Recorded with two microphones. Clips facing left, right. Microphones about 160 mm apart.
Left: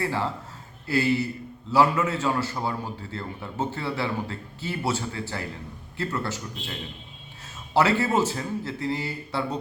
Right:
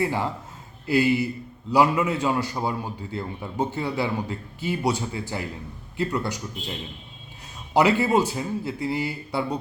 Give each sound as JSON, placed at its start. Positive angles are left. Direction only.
{"t": 0.0, "sound": "a man's voice", "side_deg": -15}